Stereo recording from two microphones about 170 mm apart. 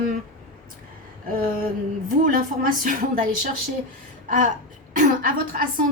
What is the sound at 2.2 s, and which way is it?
Speech, 55° right (ahead or behind).